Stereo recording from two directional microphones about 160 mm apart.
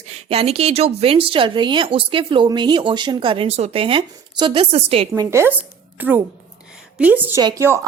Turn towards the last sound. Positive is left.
turn(degrees=-25)  # may be behind; listen again after turning